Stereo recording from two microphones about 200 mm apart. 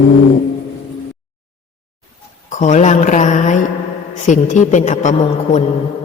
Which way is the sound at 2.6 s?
35° left (ahead or behind).